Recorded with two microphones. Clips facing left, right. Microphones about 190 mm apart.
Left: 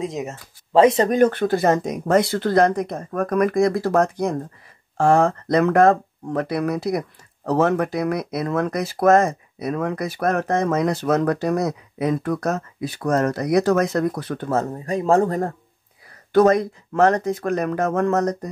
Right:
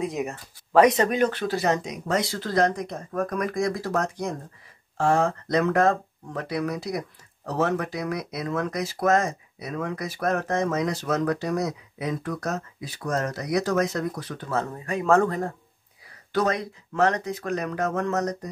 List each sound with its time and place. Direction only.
0.0 s speech: 25° left (ahead or behind)
1.1 s speech: 50° left (ahead or behind)